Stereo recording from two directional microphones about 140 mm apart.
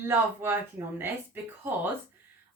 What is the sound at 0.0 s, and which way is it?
Speech, 15° right (ahead or behind).